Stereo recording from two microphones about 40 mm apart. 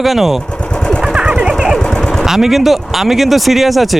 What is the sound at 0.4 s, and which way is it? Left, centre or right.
Vehicle, left.